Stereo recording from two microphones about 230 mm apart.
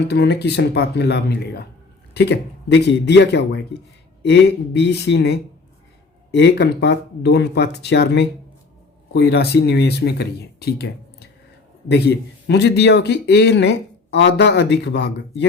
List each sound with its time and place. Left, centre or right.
0.1 s speech: left